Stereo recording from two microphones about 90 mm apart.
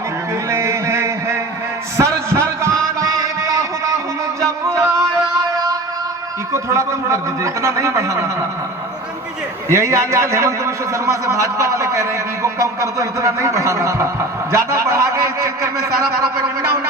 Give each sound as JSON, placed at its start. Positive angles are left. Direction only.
{"t": 0.5, "sound": "a sound", "side_deg": -30}
{"t": 6.5, "sound": "a man's voice", "side_deg": -35}
{"t": 9.6, "sound": "a man's voice", "side_deg": -35}